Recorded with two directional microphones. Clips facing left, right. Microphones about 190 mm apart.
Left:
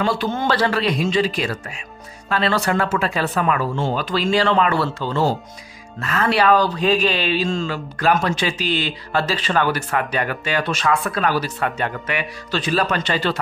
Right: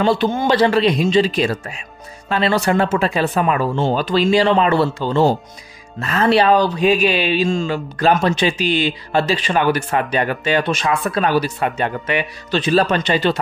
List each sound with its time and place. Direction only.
0.0 s speech: 25° right (ahead or behind)
6.8 s speech: 10° right (ahead or behind)